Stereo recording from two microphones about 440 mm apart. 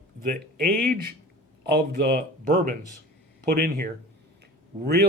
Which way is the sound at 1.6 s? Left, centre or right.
Right.